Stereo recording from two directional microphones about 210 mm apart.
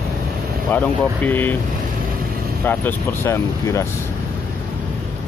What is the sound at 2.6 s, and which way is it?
Speech, 10° left (ahead or behind).